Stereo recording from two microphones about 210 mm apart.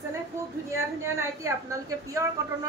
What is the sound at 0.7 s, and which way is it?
A woman's voice, 15° right (ahead or behind).